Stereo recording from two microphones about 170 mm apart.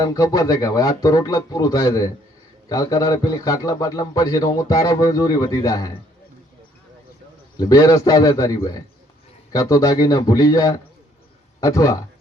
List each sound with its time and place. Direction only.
0.0 s a man's voice: 20° left (ahead or behind)
7.6 s a man's voice: 20° left (ahead or behind)